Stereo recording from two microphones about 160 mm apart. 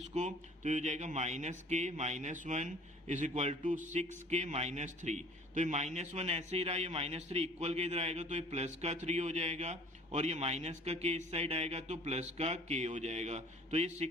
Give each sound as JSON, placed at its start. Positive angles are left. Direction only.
{"t": 0.1, "sound": "a man's voice", "side_deg": -45}